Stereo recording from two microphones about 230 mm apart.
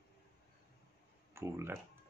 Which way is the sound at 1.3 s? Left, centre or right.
Centre.